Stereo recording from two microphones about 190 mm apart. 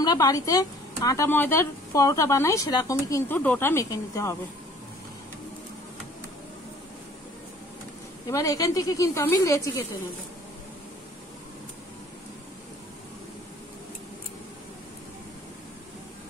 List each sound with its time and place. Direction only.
0.0 s speech: 20° left (ahead or behind)
8.3 s speech: 15° left (ahead or behind)